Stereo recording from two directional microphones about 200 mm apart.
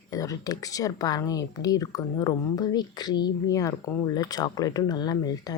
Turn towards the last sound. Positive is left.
turn(degrees=20)  # may be behind; listen again after turning